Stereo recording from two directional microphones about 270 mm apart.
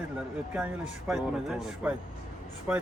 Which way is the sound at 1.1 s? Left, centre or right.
Centre.